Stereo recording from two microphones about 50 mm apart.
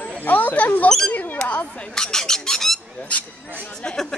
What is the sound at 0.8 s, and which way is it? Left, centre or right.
Speech, centre.